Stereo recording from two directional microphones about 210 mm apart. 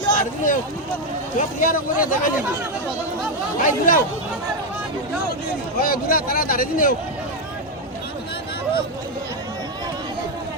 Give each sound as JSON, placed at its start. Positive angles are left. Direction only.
{"t": 0.1, "sound": "a sound", "side_deg": 40}
{"t": 1.4, "sound": "speech", "side_deg": 40}
{"t": 3.6, "sound": "speech", "side_deg": 40}
{"t": 5.8, "sound": "speech", "side_deg": 45}